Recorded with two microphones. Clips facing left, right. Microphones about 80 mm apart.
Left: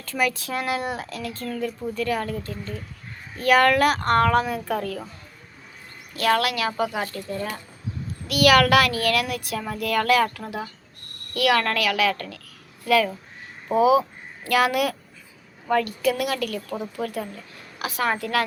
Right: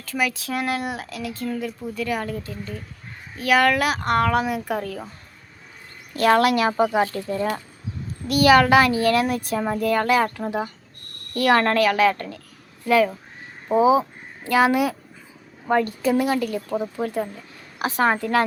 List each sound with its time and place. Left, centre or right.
0.0 s speech: centre
6.1 s speech: right
8.3 s a child's voice: right
11.3 s a child's voice: right
16.6 s speech: centre
17.7 s a woman's voice: right